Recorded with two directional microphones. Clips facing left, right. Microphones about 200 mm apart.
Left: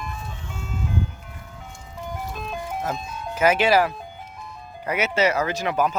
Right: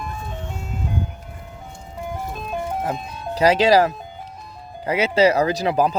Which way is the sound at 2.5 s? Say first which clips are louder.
Right 4 dB; 30° right (ahead or behind).